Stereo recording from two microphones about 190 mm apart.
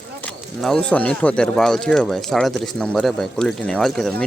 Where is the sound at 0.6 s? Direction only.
5° left (ahead or behind).